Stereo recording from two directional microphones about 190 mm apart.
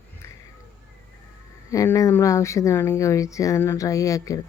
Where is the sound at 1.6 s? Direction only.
15° left (ahead or behind).